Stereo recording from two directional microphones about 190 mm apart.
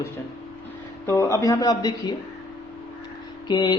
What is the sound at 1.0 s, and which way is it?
Speech, 15° left (ahead or behind).